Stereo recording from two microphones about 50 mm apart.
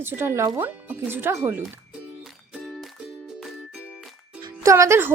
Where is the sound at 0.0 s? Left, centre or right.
Right.